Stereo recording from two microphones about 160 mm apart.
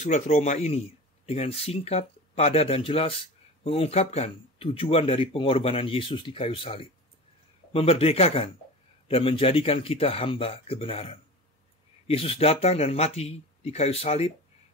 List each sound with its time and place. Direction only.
0.0 s speech: 45° left (ahead or behind)